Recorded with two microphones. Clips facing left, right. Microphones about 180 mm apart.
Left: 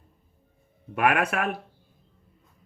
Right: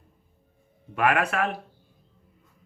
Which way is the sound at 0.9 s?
50° left (ahead or behind).